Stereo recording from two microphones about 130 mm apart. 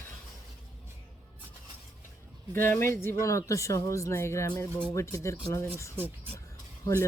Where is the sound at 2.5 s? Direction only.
20° left (ahead or behind).